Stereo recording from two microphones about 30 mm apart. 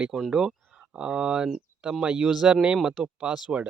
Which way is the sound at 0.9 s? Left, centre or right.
Right.